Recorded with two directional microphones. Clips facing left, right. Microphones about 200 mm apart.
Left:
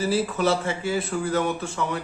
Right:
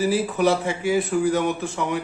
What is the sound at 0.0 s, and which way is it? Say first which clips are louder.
A man's voice: right 3 dB; 15° right (ahead or behind).